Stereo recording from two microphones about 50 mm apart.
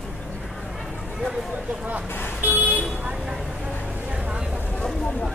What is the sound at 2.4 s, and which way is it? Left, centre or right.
Speech, right.